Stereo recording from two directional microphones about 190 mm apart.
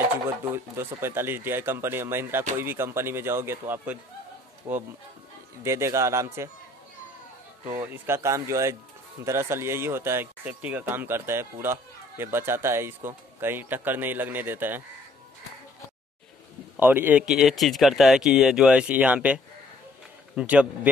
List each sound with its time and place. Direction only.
0.5 s speech: 10° right (ahead or behind)
7.6 s speech: 10° right (ahead or behind)
16.7 s speech: 10° right (ahead or behind)